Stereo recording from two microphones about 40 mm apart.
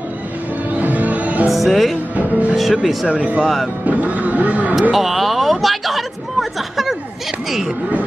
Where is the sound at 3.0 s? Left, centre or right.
Right.